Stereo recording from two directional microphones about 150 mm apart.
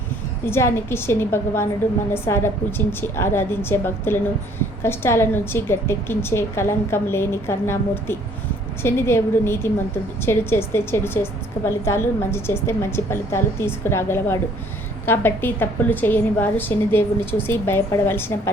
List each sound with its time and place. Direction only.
0.4 s a woman's voice: 15° left (ahead or behind)